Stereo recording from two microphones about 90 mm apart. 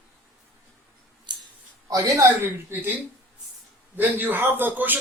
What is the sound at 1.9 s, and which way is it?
A man's voice, 40° right (ahead or behind).